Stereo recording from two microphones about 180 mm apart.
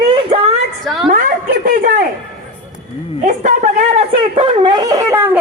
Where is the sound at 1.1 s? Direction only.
50° right (ahead or behind).